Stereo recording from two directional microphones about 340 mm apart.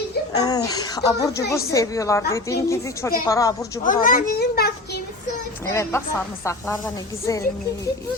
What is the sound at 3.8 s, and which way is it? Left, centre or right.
A child's voice, left.